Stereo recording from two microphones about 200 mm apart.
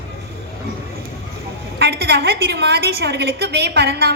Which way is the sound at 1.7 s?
55° right (ahead or behind).